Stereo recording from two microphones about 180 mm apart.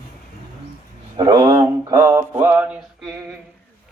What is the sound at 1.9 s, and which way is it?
Music, 20° right (ahead or behind).